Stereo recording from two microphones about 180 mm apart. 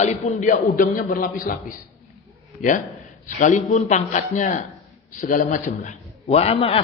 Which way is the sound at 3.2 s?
45° left (ahead or behind).